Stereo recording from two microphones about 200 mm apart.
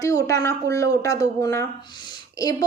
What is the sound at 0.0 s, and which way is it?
A woman's voice, 15° left (ahead or behind).